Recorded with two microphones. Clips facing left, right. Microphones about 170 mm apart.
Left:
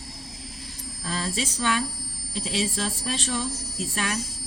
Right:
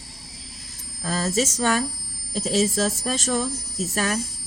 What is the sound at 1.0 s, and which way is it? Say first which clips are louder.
Speech: right 6 dB; 45° right (ahead or behind).